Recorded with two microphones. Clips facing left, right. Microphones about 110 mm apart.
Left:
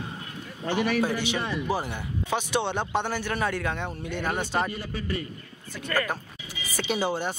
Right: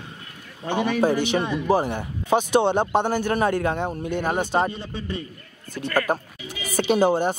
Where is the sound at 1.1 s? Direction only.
45° right (ahead or behind).